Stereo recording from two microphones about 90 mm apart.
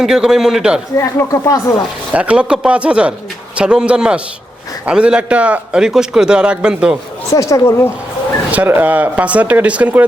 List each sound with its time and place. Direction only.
0.0 s a man's voice: 5° right (ahead or behind)
0.9 s speech: 35° left (ahead or behind)
2.1 s a man's voice: 15° right (ahead or behind)
7.3 s speech: 35° left (ahead or behind)
8.4 s a man's voice: 20° right (ahead or behind)